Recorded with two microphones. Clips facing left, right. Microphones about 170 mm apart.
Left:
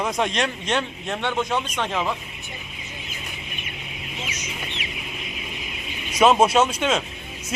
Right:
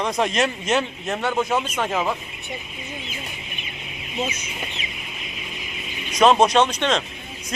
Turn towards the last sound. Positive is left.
turn(degrees=5)  # may be behind; listen again after turning